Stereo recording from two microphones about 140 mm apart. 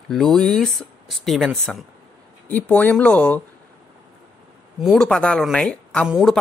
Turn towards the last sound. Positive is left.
turn(degrees=0)  # may be behind; listen again after turning